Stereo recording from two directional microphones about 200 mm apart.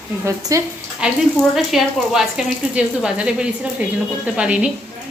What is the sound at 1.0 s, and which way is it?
Speech, 5° right (ahead or behind).